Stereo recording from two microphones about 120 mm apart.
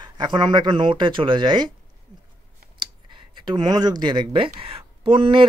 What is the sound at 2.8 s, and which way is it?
A man's voice, 40° right (ahead or behind).